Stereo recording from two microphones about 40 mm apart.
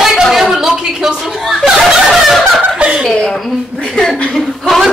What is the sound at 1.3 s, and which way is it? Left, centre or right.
Chuckle, centre.